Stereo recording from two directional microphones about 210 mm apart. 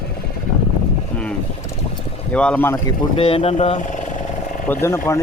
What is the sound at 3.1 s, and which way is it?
Speech, 25° left (ahead or behind).